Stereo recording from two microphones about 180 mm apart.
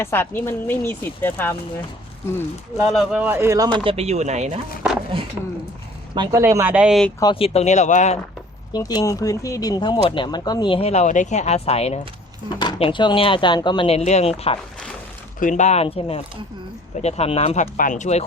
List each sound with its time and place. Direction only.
0.0 s speech: 10° left (ahead or behind)
2.8 s speech: centre (ahead or behind); by 3.8 s 20° right (ahead or behind)
3.8 s speech: 35° right (ahead or behind)
6.1 s speech: 15° right (ahead or behind)
7.2 s speech: 25° left (ahead or behind)
8.7 s speech: 20° left (ahead or behind)
15.4 s speech: 45° left (ahead or behind)